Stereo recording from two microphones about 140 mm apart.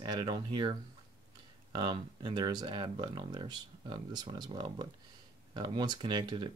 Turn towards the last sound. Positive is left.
turn(degrees=-30)  # may be behind; listen again after turning